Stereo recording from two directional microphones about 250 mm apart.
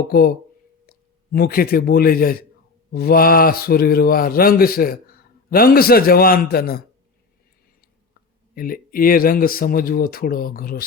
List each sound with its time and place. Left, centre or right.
0.1 s speech: left
8.5 s speech: left